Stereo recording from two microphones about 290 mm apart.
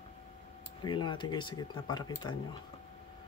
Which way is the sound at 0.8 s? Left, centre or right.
Centre.